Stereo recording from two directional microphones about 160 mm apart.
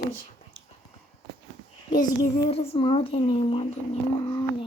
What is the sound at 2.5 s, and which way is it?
A woman's voice, 35° left (ahead or behind).